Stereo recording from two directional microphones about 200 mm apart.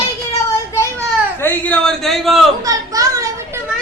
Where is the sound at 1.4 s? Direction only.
10° left (ahead or behind).